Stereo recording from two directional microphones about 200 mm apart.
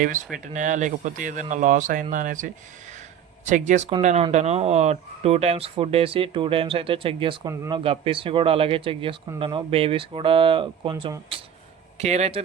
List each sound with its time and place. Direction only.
0.0 s speech: 40° right (ahead or behind)
7.5 s speech: 15° right (ahead or behind)
7.9 s speech: 25° right (ahead or behind)